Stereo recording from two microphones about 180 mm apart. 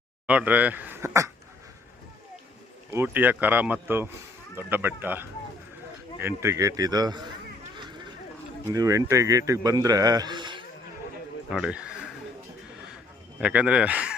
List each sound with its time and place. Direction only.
0.3 s speech: 10° right (ahead or behind)
2.9 s speech: 10° right (ahead or behind)
7.8 s a sound: 25° right (ahead or behind)
8.7 s a man's voice: 20° right (ahead or behind)
11.4 s a sound: 5° right (ahead or behind)
13.4 s speech: 10° right (ahead or behind)